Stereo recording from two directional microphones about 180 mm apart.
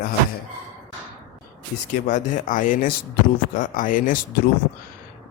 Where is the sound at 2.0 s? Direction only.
45° left (ahead or behind).